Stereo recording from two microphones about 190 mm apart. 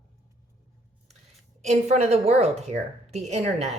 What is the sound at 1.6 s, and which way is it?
A woman's voice, 35° right (ahead or behind).